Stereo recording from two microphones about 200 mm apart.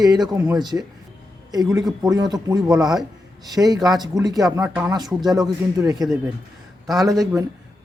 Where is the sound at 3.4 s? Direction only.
20° right (ahead or behind).